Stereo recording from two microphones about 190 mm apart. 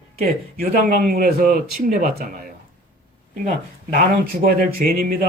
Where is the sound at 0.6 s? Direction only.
50° right (ahead or behind).